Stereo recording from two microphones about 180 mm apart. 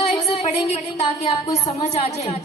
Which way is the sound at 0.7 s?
35° left (ahead or behind).